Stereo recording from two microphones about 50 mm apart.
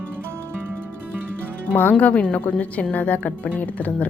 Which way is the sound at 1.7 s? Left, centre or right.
Left.